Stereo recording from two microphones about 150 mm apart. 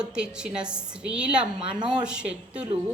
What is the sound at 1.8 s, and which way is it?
Speech, 5° right (ahead or behind).